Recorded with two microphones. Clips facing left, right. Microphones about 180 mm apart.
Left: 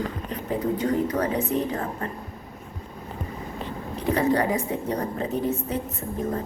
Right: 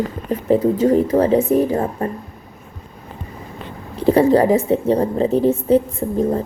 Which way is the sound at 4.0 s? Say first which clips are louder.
Right 9 dB; 30° right (ahead or behind).